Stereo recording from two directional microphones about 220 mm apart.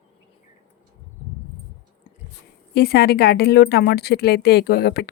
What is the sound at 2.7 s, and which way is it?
A woman's voice, 45° left (ahead or behind).